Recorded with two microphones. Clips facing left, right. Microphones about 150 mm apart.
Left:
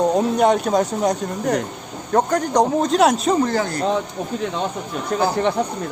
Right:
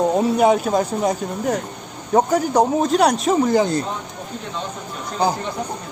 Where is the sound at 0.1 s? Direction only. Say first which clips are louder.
Right 1 dB; 5° right (ahead or behind).